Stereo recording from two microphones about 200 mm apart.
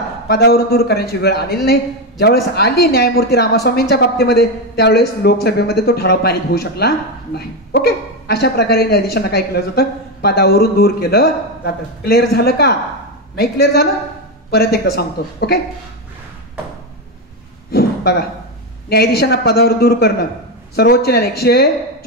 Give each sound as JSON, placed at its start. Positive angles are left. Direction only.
{"t": 0.3, "sound": "a man's voice", "side_deg": 50}
{"t": 17.6, "sound": "a sound", "side_deg": 50}
{"t": 18.9, "sound": "a man's voice", "side_deg": 55}